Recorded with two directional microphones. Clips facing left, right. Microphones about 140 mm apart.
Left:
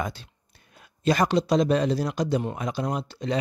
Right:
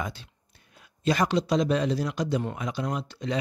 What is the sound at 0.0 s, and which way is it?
Speech, 45° left (ahead or behind).